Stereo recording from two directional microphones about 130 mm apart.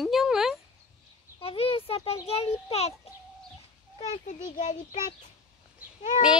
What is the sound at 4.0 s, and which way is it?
Speech, 65° left (ahead or behind).